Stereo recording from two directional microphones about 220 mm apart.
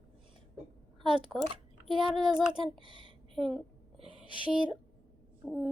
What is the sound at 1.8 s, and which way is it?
Speech, centre (ahead or behind).